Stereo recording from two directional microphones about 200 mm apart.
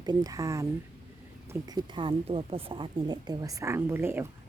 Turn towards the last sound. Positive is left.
turn(degrees=-10)  # may be behind; listen again after turning